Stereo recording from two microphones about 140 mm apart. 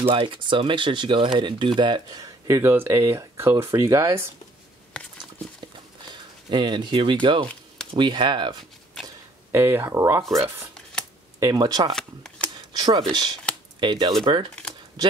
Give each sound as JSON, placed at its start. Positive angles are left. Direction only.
{"t": 0.0, "sound": "speech", "side_deg": -40}
{"t": 4.9, "sound": "patter", "side_deg": 5}
{"t": 6.5, "sound": "speech", "side_deg": -35}
{"t": 7.4, "sound": "a sound", "side_deg": 5}
{"t": 7.9, "sound": "speech", "side_deg": -35}
{"t": 9.5, "sound": "speech", "side_deg": -15}
{"t": 11.3, "sound": "speech", "side_deg": -25}
{"t": 11.9, "sound": "speech", "side_deg": 5}
{"t": 12.7, "sound": "speech", "side_deg": -30}